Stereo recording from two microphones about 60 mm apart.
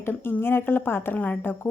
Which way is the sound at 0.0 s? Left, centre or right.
Left.